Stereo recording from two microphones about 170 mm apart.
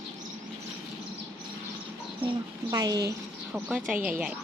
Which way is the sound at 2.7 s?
20° right (ahead or behind).